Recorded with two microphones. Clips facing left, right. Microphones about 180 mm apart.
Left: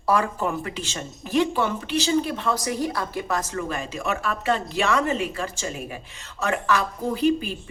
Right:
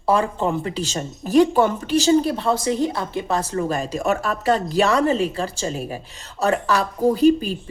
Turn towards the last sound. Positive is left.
turn(degrees=-40)  # may be behind; listen again after turning